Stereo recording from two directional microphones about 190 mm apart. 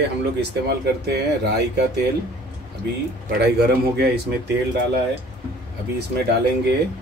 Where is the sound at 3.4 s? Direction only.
55° right (ahead or behind).